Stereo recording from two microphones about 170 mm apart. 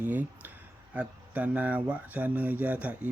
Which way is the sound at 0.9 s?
10° right (ahead or behind).